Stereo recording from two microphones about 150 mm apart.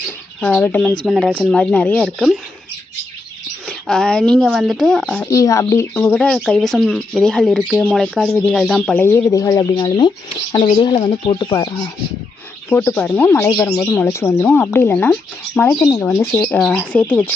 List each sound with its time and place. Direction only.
0.4 s speech: 10° left (ahead or behind); by 1.5 s 5° right (ahead or behind)
1.5 s speech: 5° left (ahead or behind)
2.0 s speech: centre (ahead or behind)
3.7 s speech: 5° left (ahead or behind)
5.2 s speech: 20° left (ahead or behind)
12.7 s speech: 15° left (ahead or behind)
15.8 s speech: 20° left (ahead or behind)
16.6 s speech: centre (ahead or behind)